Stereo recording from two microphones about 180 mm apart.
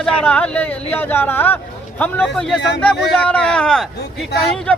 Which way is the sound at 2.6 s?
70° left (ahead or behind).